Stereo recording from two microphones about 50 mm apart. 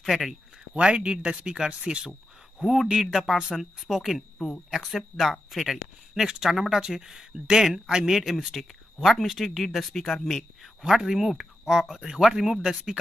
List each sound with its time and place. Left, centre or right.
0.0 s speech: centre
0.7 s speech: centre
2.6 s speech: centre
4.4 s speech: centre
4.7 s speech: centre
10.8 s speech: centre